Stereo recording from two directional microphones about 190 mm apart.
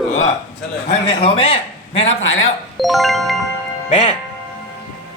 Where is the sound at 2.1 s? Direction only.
90° left.